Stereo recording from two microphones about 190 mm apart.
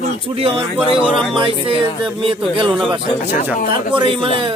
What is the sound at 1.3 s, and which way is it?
Speech, 25° right (ahead or behind).